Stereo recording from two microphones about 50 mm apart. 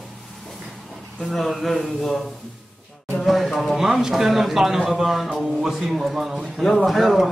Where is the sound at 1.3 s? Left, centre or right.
Centre.